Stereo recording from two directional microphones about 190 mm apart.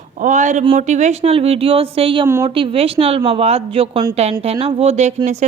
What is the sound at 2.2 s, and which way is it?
Speech, 15° right (ahead or behind).